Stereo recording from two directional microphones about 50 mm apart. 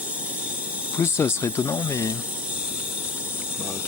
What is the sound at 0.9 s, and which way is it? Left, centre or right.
Speech, left.